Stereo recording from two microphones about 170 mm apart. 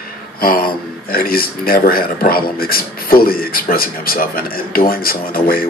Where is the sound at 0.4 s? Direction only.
60° left (ahead or behind).